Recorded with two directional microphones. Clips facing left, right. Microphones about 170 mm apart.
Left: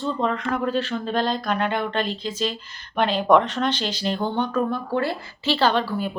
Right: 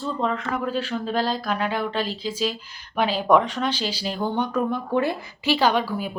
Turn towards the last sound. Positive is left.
turn(degrees=-10)  # may be behind; listen again after turning